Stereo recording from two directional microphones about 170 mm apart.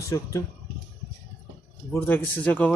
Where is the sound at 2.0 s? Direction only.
10° left (ahead or behind).